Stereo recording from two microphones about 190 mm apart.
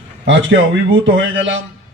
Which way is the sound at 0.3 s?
80° right.